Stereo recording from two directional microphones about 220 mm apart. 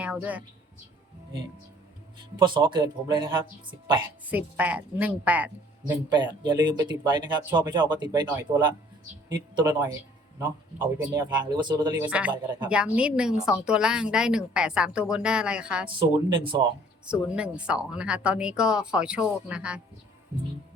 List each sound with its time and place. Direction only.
0.0 s a woman's voice: 5° right (ahead or behind)
2.4 s speech: 20° right (ahead or behind)
4.3 s speech: 5° right (ahead or behind)
5.9 s speech: 20° right (ahead or behind)
12.0 s a woman's voice: 5° right (ahead or behind)
15.9 s speech: 20° right (ahead or behind)
17.2 s a woman's voice: 5° right (ahead or behind)